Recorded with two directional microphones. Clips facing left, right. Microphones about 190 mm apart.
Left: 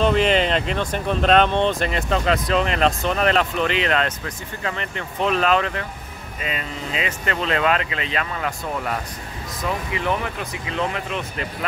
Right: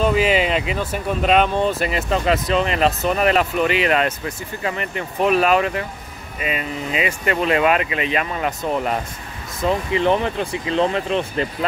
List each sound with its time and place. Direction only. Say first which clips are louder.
0.0 s speech: right 1 dB; 5° right (ahead or behind); by 11.4 s 30° right (ahead or behind)